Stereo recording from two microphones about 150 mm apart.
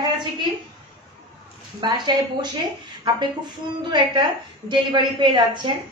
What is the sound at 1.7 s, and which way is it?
A woman's voice, 30° right (ahead or behind).